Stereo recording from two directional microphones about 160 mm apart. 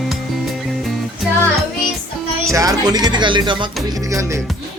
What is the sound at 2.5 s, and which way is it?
Speech, 25° right (ahead or behind).